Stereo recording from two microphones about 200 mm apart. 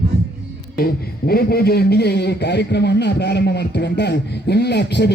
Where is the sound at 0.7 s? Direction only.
50° left (ahead or behind).